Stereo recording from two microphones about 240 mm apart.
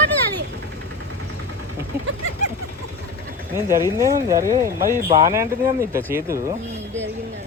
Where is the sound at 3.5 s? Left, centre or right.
Centre.